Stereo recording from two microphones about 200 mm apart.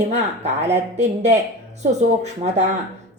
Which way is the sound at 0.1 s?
35° right (ahead or behind).